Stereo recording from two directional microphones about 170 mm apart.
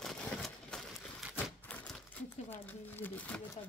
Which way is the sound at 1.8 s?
10° left (ahead or behind).